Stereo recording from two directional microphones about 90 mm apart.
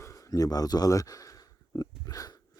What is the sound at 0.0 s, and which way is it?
Speech, 40° left (ahead or behind).